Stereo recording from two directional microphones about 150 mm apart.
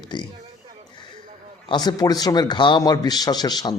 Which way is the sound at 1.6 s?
25° left (ahead or behind).